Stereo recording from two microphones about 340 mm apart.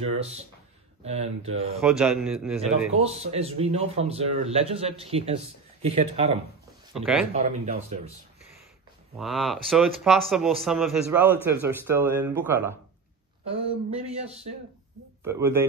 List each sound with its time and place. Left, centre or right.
0.0 s a man's voice: centre
1.8 s speech: centre
3.0 s a man's voice: centre
6.9 s speech: centre
7.3 s speech: centre
9.2 s a man's voice: centre
13.5 s a man's voice: centre
15.2 s a man's voice: centre